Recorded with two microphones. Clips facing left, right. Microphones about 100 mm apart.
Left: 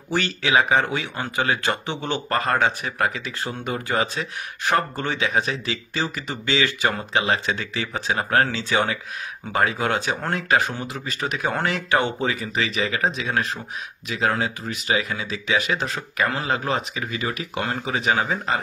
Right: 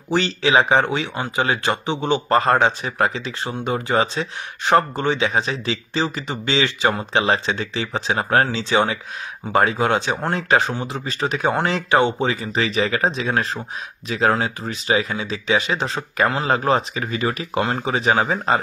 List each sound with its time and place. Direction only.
0.1 s speech: 20° right (ahead or behind)
11.1 s speech: 30° right (ahead or behind)